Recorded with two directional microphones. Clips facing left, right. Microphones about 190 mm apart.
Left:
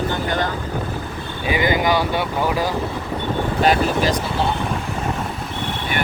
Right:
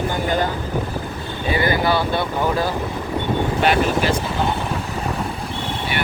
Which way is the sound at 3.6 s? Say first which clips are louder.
Left 1 dB; 40° left (ahead or behind).